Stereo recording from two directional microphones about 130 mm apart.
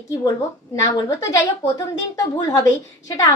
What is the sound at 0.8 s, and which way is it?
A woman's voice, 25° left (ahead or behind).